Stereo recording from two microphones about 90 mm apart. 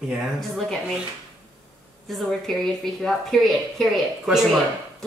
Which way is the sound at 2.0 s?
Centre (ahead or behind).